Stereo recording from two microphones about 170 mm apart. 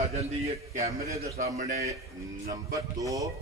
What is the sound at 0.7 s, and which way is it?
Speech, 40° right (ahead or behind).